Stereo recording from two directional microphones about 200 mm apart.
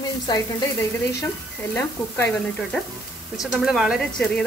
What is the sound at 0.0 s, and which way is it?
Frying, 20° left (ahead or behind).